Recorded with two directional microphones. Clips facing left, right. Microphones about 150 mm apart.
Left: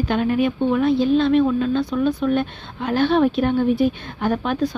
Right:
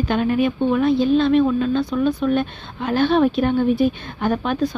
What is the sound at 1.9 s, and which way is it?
Speech, 20° right (ahead or behind).